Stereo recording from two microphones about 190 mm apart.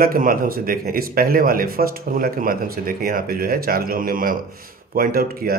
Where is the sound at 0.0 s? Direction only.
50° right (ahead or behind).